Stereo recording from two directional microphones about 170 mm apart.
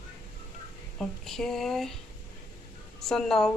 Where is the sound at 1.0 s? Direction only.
Centre (ahead or behind).